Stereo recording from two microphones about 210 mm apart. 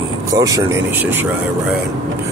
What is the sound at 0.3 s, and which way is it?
Speech, 15° right (ahead or behind).